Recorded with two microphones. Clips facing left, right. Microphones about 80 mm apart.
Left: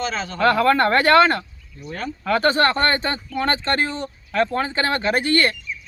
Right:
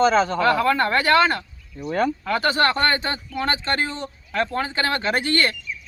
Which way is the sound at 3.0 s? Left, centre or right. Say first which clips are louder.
Left 2 dB; right.